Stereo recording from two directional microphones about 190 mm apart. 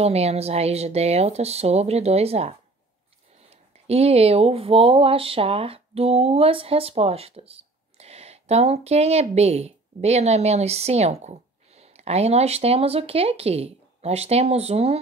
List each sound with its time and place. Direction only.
0.0 s speech: 35° right (ahead or behind)
3.8 s speech: 35° right (ahead or behind)